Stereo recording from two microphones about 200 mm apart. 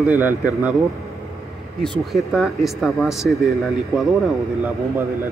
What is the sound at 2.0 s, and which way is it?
Speech, centre (ahead or behind).